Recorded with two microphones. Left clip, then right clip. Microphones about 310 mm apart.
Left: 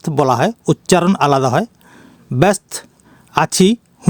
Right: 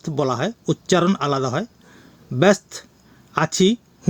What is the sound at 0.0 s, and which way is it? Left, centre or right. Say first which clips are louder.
Speech: left 8 dB; left.